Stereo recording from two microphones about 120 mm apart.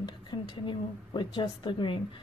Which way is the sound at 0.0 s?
40° left (ahead or behind).